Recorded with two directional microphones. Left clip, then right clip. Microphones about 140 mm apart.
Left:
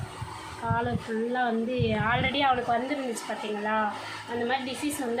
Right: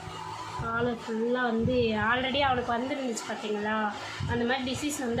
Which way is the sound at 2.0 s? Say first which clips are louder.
Left 1 dB; 15° left (ahead or behind).